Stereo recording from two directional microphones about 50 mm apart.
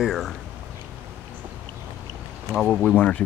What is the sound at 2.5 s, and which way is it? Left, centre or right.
Speech, centre.